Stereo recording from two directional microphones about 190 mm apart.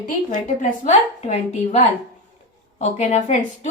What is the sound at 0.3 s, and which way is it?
A woman's voice, 40° left (ahead or behind).